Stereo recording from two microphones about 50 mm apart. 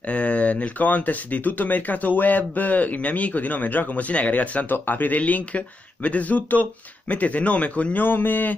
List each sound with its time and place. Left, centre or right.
0.1 s speech: left